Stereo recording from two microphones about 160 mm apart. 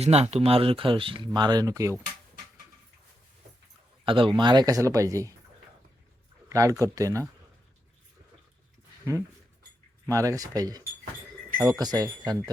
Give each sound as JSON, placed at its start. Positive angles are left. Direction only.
{"t": 0.0, "sound": "speech", "side_deg": -40}
{"t": 4.0, "sound": "speech", "side_deg": -30}
{"t": 6.5, "sound": "speech", "side_deg": -20}
{"t": 10.1, "sound": "speech", "side_deg": -20}